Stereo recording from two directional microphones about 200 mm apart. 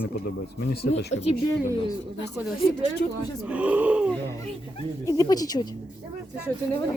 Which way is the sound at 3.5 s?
5° right (ahead or behind).